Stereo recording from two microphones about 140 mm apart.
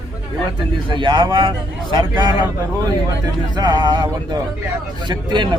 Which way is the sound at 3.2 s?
30° right (ahead or behind).